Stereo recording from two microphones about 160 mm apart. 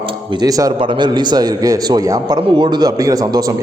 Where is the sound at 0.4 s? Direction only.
20° right (ahead or behind).